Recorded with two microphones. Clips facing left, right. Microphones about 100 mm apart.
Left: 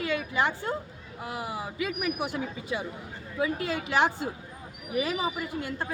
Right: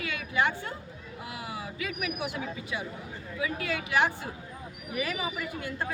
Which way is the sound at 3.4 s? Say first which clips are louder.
Left 3 dB; 35° left (ahead or behind).